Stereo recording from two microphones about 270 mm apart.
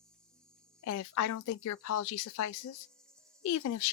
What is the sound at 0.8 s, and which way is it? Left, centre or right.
Speech, left.